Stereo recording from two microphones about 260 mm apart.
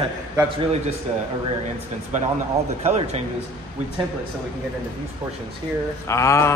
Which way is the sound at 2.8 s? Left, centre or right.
Right.